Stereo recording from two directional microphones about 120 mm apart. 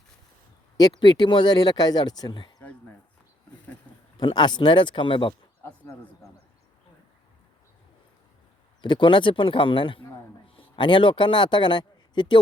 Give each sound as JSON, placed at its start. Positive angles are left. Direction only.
{"t": 0.8, "sound": "speech", "side_deg": 40}
{"t": 4.2, "sound": "speech", "side_deg": 40}
{"t": 8.8, "sound": "speech", "side_deg": 40}